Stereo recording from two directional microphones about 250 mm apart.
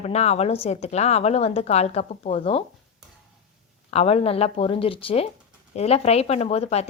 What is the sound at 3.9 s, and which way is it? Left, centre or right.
Speech, left.